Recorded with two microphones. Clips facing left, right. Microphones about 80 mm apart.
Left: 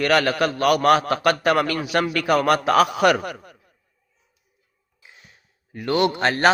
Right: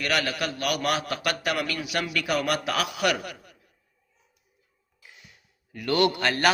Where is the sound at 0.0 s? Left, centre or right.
Left.